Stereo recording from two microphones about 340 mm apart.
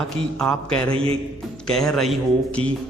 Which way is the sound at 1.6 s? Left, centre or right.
Centre.